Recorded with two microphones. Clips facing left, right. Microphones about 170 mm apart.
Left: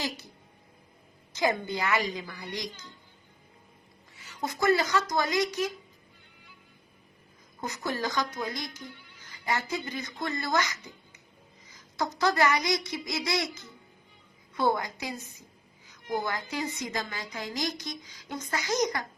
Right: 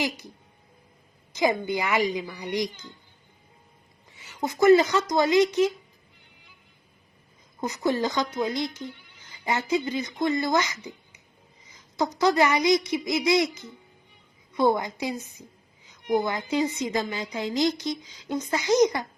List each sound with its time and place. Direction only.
1.3 s a woman's voice: 15° right (ahead or behind)
4.3 s speech: 20° right (ahead or behind)
7.6 s speech: 20° right (ahead or behind)